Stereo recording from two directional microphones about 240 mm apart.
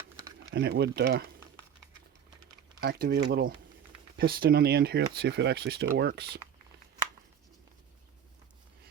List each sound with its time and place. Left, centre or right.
0.5 s speech: right
2.8 s speech: right